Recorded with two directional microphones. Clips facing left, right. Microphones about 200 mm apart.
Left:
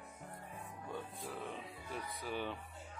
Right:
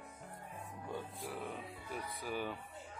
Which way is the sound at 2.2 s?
5° right (ahead or behind).